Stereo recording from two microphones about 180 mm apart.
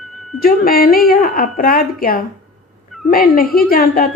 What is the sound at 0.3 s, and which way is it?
A woman's voice, 55° left (ahead or behind).